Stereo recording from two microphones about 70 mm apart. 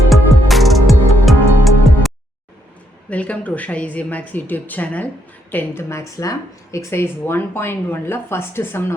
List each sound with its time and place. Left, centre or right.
0.1 s music: centre
3.1 s a woman's voice: centre
5.9 s speech: left